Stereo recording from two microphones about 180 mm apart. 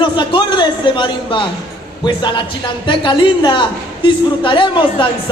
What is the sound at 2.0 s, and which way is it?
A woman's voice, 25° left (ahead or behind).